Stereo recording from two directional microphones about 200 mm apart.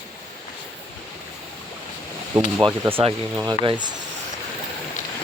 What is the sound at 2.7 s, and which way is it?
Speech, 10° right (ahead or behind).